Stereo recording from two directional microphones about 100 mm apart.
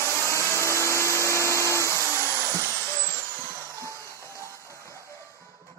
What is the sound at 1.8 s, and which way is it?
Vacuum cleaner, 30° right (ahead or behind).